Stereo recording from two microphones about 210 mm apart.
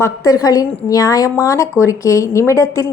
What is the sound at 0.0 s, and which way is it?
Speech, 15° left (ahead or behind).